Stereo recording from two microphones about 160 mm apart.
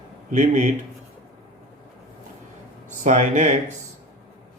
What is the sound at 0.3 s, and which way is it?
Speech, 50° right (ahead or behind).